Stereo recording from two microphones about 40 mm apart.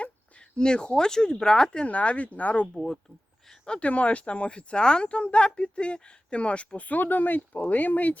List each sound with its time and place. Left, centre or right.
0.0 s speech: left
1.8 s speech: left
2.7 s speech: centre
3.7 s speech: left